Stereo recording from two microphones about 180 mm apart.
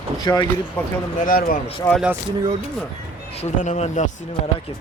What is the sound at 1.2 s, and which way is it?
Speech, 50° left (ahead or behind).